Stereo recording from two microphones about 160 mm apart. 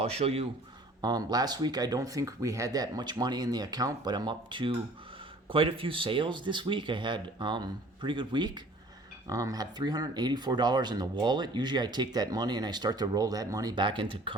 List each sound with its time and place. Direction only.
0.0 s speech: 40° right (ahead or behind)
1.0 s speech: 25° right (ahead or behind)